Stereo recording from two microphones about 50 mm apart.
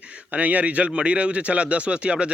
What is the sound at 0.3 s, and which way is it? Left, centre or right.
Speech, right.